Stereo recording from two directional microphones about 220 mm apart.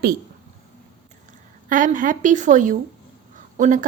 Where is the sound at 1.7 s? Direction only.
35° right (ahead or behind).